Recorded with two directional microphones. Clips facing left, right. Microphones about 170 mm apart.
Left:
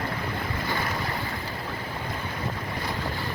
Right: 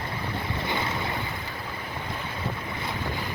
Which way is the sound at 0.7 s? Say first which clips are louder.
Even; 25° right (ahead or behind).